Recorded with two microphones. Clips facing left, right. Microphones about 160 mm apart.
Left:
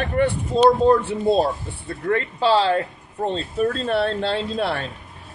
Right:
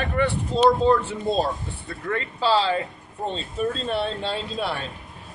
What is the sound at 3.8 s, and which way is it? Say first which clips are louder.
Speech: left 4 dB; 60° left (ahead or behind).